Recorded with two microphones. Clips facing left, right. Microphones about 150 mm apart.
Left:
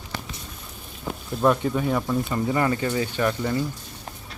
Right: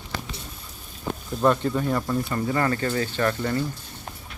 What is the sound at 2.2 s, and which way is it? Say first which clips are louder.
Speech: left 1 dB; 15° left (ahead or behind).